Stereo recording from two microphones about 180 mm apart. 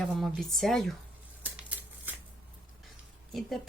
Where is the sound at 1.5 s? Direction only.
10° right (ahead or behind).